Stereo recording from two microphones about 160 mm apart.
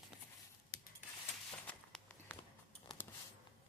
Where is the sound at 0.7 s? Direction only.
80° left.